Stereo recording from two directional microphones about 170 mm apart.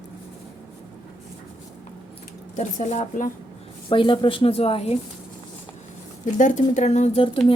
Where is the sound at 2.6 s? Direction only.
45° left (ahead or behind).